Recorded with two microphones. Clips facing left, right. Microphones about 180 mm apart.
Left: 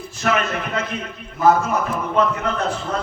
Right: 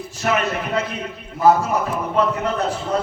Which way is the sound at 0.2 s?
35° right (ahead or behind).